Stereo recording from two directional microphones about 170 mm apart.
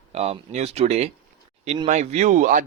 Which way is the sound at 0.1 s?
35° right (ahead or behind).